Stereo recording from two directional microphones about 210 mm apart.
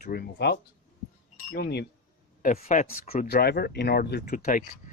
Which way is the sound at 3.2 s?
50° left (ahead or behind).